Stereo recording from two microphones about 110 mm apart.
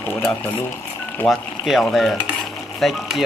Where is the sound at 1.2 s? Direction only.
Centre (ahead or behind).